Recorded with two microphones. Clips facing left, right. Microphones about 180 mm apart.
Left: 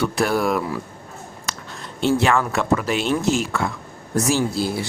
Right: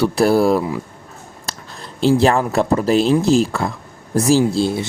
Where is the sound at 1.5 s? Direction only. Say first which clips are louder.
Right 1 dB; 35° right (ahead or behind).